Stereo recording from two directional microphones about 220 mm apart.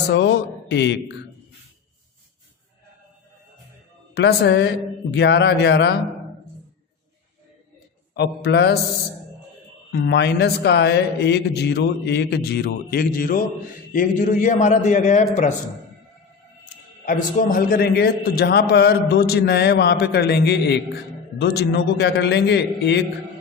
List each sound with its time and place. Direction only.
0.1 s a man's voice: 55° left (ahead or behind)
4.1 s a man's voice: 50° left (ahead or behind)
8.1 s a man's voice: 50° left (ahead or behind)
10.1 s a man's voice: 50° left (ahead or behind); by 15.2 s 35° left (ahead or behind)
17.1 s a man's voice: 40° left (ahead or behind)